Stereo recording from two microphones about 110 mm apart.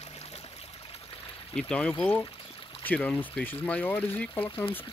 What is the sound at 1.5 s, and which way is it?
Speech, 10° left (ahead or behind).